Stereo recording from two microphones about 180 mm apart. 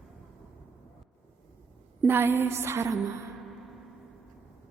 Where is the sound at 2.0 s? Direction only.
10° right (ahead or behind).